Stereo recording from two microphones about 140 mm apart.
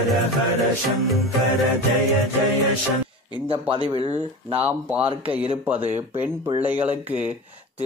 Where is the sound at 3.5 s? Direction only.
40° right (ahead or behind).